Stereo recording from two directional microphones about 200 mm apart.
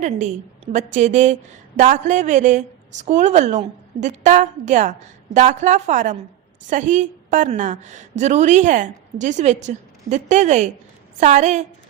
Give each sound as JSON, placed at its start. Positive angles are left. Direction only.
{"t": 0.0, "sound": "a woman's voice", "side_deg": -35}